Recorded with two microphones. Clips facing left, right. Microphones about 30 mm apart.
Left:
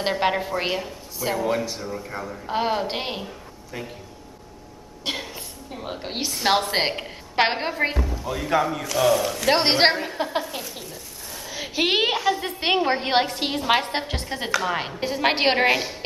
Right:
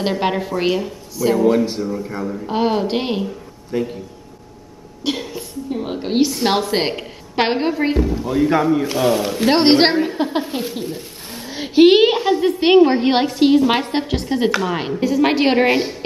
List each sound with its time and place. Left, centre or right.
0.0 s speech: centre
5.0 s a woman's voice: centre
10.9 s a woman's voice: right; by 15.0 s centre
15.0 s a woman's voice: left